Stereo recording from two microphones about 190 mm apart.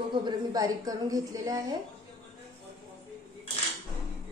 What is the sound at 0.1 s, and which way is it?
A woman's voice, 25° right (ahead or behind).